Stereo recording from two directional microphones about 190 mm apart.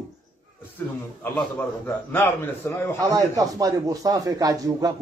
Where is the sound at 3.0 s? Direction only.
15° right (ahead or behind).